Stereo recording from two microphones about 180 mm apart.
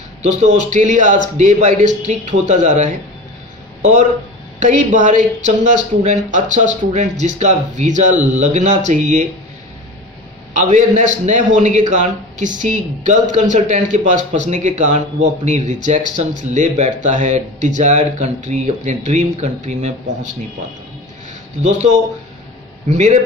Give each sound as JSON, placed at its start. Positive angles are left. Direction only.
{"t": 0.2, "sound": "speech", "side_deg": -40}
{"t": 4.6, "sound": "speech", "side_deg": -45}
{"t": 10.5, "sound": "speech", "side_deg": -45}
{"t": 21.6, "sound": "speech", "side_deg": -40}